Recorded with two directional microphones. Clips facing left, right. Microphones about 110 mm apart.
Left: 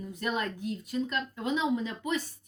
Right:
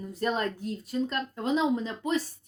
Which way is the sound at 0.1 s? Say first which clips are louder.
Right 4 dB; 35° right (ahead or behind).